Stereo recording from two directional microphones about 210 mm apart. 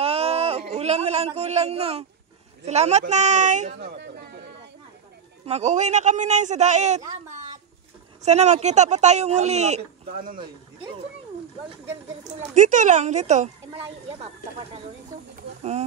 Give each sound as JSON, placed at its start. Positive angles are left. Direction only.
{"t": 0.0, "sound": "a sound", "side_deg": -30}
{"t": 2.6, "sound": "speech", "side_deg": -30}
{"t": 3.7, "sound": "speech", "side_deg": -50}
{"t": 5.4, "sound": "speech", "side_deg": -30}
{"t": 8.2, "sound": "speech", "side_deg": -30}
{"t": 12.1, "sound": "speech", "side_deg": -35}